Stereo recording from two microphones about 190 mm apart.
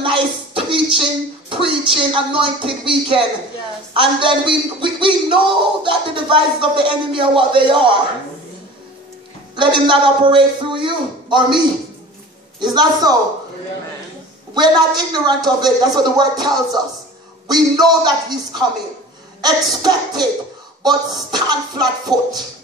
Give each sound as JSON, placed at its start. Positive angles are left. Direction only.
{"t": 0.0, "sound": "a sound", "side_deg": -25}
{"t": 1.5, "sound": "a man's voice", "side_deg": -25}
{"t": 9.6, "sound": "a man's voice", "side_deg": -25}
{"t": 14.5, "sound": "a man's voice", "side_deg": -20}